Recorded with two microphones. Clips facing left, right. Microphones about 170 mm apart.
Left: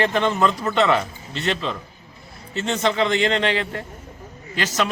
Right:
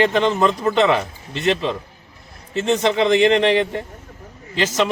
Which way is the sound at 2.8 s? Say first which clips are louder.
Right 4 dB; 25° right (ahead or behind).